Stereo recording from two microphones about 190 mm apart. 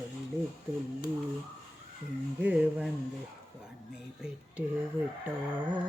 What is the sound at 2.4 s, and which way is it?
Music, 5° right (ahead or behind).